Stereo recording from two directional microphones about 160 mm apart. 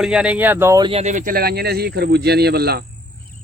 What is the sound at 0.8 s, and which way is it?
Speech, 40° right (ahead or behind).